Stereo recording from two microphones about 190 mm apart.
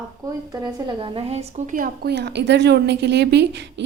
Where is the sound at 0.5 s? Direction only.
20° right (ahead or behind); by 3.8 s 65° right (ahead or behind).